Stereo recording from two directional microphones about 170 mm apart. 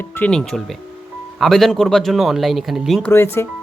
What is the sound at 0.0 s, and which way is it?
Speech, 10° left (ahead or behind).